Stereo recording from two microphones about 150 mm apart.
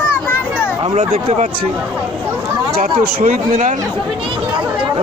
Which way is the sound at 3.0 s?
70° right (ahead or behind).